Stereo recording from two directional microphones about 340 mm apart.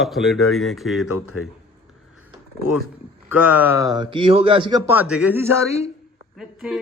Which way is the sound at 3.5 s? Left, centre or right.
Centre.